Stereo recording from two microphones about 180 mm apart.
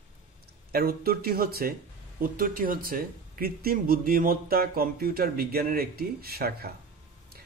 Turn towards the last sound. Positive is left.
turn(degrees=-60)  # may be behind; listen again after turning